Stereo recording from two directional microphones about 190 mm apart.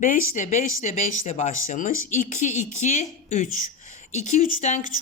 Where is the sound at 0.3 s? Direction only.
40° left (ahead or behind).